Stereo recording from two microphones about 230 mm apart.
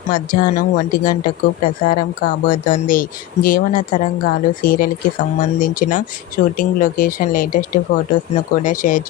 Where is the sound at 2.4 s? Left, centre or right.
Left.